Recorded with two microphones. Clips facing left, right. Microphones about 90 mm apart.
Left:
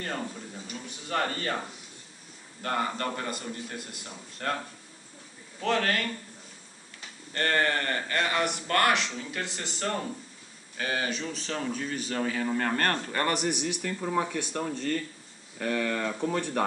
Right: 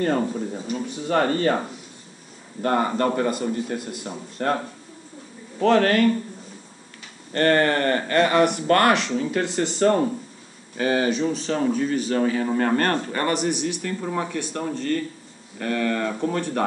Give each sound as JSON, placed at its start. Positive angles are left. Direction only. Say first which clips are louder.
{"t": 0.0, "sound": "a man's voice", "louder": "right 12 dB", "side_deg": -40}
{"t": 2.6, "sound": "a man's voice", "louder": "right 9 dB", "side_deg": -30}
{"t": 3.8, "sound": "a man's voice", "louder": "right 11 dB", "side_deg": -20}
{"t": 4.1, "sound": "a man's voice", "louder": "right 8 dB", "side_deg": -30}
{"t": 5.6, "sound": "speech", "louder": "right 10 dB", "side_deg": -45}
{"t": 7.3, "sound": "a man's voice", "louder": "right 8 dB", "side_deg": -50}
{"t": 11.1, "sound": "speech", "louder": "right 11 dB", "side_deg": -15}
{"t": 13.4, "sound": "a man's voice", "louder": "right 5 dB", "side_deg": 10}